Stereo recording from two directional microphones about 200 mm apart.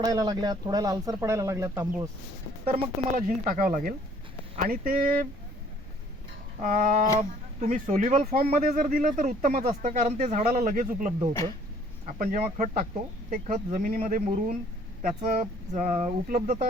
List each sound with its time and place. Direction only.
0.0 s speech: 20° right (ahead or behind)
2.7 s speech: 40° right (ahead or behind)
6.6 s speech: 40° right (ahead or behind)